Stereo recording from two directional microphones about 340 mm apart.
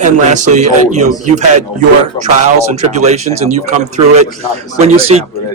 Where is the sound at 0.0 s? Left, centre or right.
Right.